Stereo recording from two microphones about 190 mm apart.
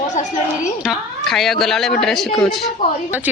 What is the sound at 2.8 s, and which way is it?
Speech, 25° left (ahead or behind).